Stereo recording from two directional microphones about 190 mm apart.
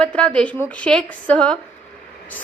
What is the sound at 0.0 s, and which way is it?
A woman's voice, 5° left (ahead or behind).